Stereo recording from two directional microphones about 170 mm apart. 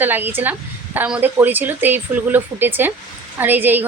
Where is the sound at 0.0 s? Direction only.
10° right (ahead or behind).